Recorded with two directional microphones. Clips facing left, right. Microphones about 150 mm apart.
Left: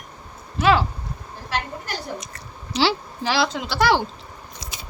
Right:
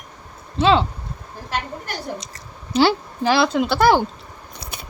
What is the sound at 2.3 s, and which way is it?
Speech, 50° right (ahead or behind).